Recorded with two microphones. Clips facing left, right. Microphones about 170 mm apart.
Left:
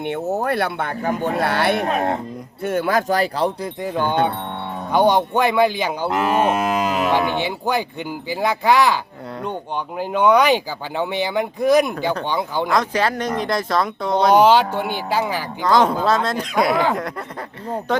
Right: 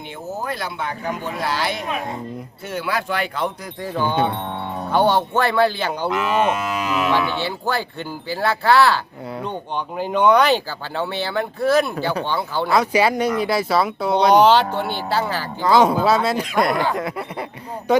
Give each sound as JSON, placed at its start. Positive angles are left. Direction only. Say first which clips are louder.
{"t": 0.0, "sound": "speech", "louder": "left 7 dB", "side_deg": 65}
{"t": 2.6, "sound": "speech", "louder": "left 6 dB", "side_deg": 50}
{"t": 4.9, "sound": "speech", "louder": "left 2 dB", "side_deg": 15}
{"t": 6.1, "sound": "cattle", "louder": "left 2 dB", "side_deg": 45}
{"t": 7.3, "sound": "speech", "louder": "left 2 dB", "side_deg": 15}
{"t": 12.6, "sound": "speech", "louder": "right 4 dB", "side_deg": -10}
{"t": 15.6, "sound": "speech", "louder": "right 1 dB", "side_deg": -10}
{"t": 16.9, "sound": "snicker", "louder": "even", "side_deg": -5}